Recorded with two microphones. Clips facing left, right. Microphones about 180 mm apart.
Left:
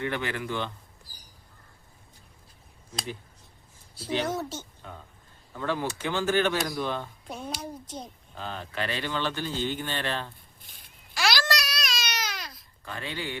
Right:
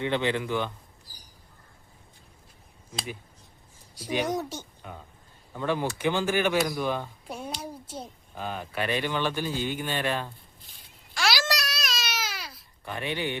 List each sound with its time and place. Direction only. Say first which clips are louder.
0.0 s a man's voice: right 4 dB; 20° right (ahead or behind)
3.9 s a woman's voice: right 1 dB; 15° right (ahead or behind)
11.1 s babbling: even; centre (ahead or behind)
11.5 s baby cry: even; centre (ahead or behind)
12.8 s speech: right 4 dB; 20° right (ahead or behind)